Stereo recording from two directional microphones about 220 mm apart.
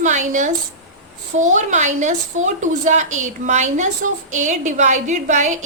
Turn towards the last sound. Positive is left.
turn(degrees=-35)  # may be behind; listen again after turning